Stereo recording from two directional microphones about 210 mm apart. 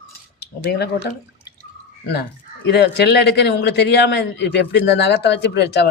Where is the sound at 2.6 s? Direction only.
50° left (ahead or behind).